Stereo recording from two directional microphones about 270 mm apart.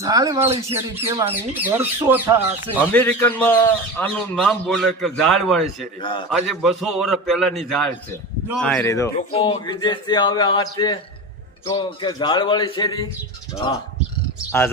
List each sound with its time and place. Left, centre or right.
0.0 s speech: centre
0.7 s speech: centre
2.8 s a man's voice: centre
6.0 s speech: centre
6.3 s a man's voice: centre